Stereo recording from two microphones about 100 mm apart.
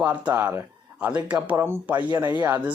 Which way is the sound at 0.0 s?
20° right (ahead or behind).